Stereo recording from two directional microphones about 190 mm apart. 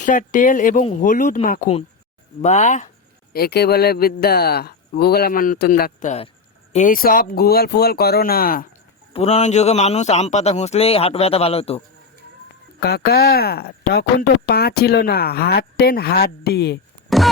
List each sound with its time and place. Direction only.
0.0 s speech: 40° left (ahead or behind)
2.4 s a man's voice: 40° left (ahead or behind)
3.3 s speech: 55° left (ahead or behind); by 6.3 s 35° left (ahead or behind)
6.7 s speech: 45° left (ahead or behind)
9.1 s a man's voice: 35° left (ahead or behind)
12.8 s speech: 55° left (ahead or behind)
17.1 s music: centre (ahead or behind)